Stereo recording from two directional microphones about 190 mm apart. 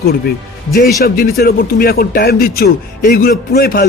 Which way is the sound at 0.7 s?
50° left (ahead or behind).